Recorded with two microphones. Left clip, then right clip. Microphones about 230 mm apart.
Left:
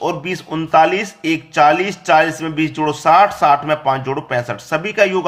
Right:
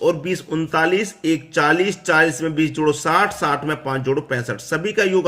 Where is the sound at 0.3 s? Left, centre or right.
Centre.